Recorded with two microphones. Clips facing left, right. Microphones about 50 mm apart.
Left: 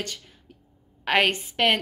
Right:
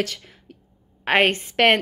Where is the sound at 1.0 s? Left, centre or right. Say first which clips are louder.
Right 3 dB; right.